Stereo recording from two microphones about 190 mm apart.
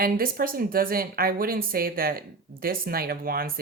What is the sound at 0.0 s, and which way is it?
A woman's voice, 50° right (ahead or behind).